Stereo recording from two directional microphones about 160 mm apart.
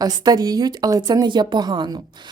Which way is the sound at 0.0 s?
25° right (ahead or behind).